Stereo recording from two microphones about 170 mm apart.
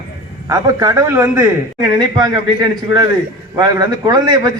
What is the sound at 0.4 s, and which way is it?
A man's voice, 20° right (ahead or behind).